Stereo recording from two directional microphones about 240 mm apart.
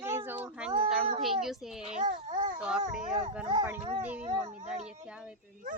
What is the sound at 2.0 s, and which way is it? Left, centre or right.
Babbling, right.